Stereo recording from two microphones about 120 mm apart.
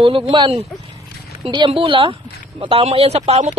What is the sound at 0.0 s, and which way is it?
Speech, 45° right (ahead or behind).